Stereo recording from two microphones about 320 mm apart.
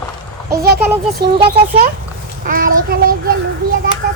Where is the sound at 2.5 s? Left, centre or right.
Right.